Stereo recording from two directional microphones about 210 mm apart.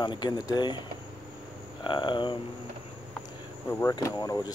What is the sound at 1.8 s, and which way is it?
Speech, 20° left (ahead or behind).